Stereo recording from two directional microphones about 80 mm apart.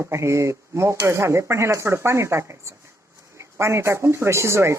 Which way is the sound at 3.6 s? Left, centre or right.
Right.